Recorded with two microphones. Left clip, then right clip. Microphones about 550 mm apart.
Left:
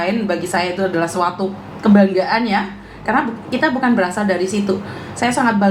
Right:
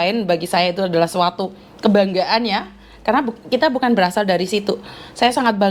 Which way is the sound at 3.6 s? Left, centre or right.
Right.